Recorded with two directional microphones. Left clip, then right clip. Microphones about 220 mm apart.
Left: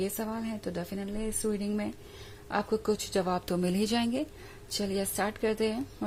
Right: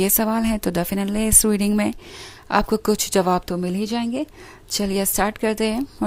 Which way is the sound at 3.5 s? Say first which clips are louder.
Right 5 dB; 15° right (ahead or behind).